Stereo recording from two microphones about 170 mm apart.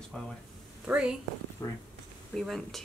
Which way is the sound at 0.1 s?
5° left (ahead or behind).